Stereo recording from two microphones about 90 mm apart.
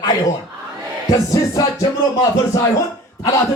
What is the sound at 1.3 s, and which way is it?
Music, 40° left (ahead or behind).